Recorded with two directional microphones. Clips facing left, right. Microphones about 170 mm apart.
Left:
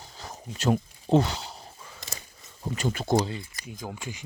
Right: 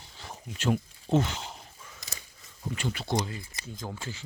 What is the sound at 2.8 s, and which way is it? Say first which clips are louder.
Speech: left 6 dB; 45° left (ahead or behind).